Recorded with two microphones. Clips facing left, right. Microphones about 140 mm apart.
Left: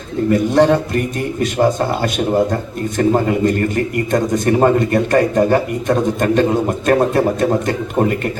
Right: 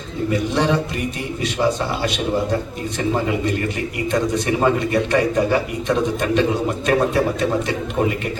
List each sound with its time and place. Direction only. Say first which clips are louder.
0.3 s a man's voice: left 7 dB; 50° left (ahead or behind)